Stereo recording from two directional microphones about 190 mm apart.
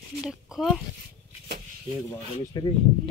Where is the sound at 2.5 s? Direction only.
20° left (ahead or behind).